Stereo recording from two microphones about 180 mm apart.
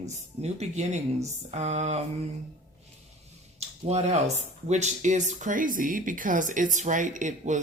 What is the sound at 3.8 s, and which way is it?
Speech, 40° right (ahead or behind).